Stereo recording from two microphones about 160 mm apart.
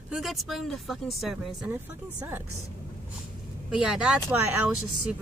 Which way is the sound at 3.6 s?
5° right (ahead or behind).